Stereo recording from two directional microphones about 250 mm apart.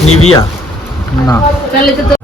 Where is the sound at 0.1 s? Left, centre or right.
Left.